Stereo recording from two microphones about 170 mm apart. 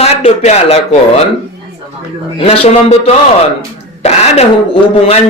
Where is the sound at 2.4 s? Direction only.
35° left (ahead or behind).